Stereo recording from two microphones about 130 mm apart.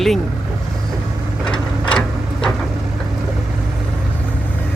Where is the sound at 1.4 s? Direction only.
5° left (ahead or behind).